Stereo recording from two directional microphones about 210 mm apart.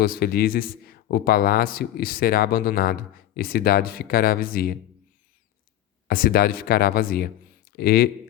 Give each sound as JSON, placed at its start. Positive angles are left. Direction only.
{"t": 0.0, "sound": "a man's voice", "side_deg": 45}
{"t": 6.1, "sound": "a man's voice", "side_deg": 45}